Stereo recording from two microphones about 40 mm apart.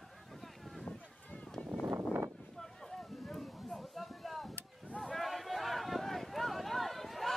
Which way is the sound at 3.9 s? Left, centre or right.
Centre.